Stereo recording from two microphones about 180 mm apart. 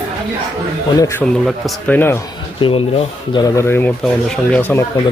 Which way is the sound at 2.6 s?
30° left (ahead or behind).